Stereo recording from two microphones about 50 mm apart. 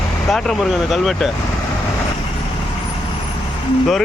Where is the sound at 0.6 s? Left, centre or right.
Centre.